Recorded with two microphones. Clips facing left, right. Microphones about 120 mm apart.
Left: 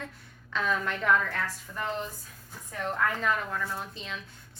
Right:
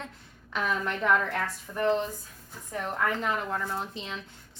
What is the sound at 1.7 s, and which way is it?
Speech, 25° right (ahead or behind).